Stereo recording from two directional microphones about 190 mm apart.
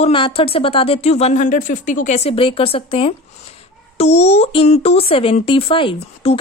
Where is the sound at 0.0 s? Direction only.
25° left (ahead or behind).